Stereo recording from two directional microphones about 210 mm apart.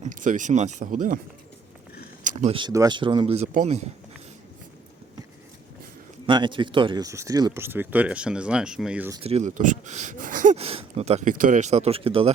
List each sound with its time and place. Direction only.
0.0 s speech: 40° right (ahead or behind)
2.2 s a sound: 35° right (ahead or behind)
2.6 s speech: 20° right (ahead or behind)
6.2 s speech: 20° right (ahead or behind); by 9.1 s 5° right (ahead or behind)
9.1 s speech: 30° right (ahead or behind)